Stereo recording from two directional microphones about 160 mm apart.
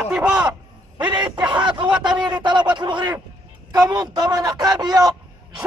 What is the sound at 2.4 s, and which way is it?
Speech, 25° right (ahead or behind).